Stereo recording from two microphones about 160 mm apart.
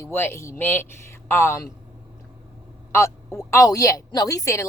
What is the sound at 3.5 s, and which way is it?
Speech, 20° left (ahead or behind).